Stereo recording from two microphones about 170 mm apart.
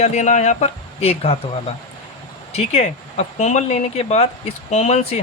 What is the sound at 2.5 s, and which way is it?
Speech, 40° left (ahead or behind).